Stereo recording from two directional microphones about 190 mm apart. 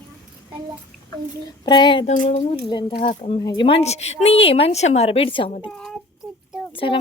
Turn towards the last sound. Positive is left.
turn(degrees=25)  # may be behind; listen again after turning